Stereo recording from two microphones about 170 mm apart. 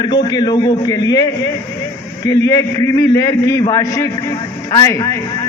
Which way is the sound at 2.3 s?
20° left (ahead or behind).